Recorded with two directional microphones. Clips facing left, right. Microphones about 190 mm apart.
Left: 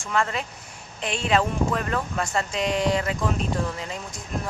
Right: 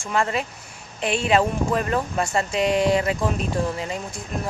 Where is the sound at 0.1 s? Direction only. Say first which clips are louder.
Right 2 dB; 10° right (ahead or behind).